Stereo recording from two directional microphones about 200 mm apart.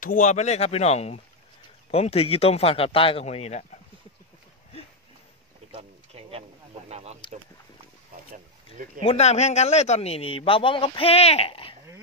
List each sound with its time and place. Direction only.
0.0 s a man's voice: 40° left (ahead or behind)
5.7 s a sound: 30° right (ahead or behind)
6.9 s speech: 30° right (ahead or behind)
9.0 s a man's voice: 35° left (ahead or behind)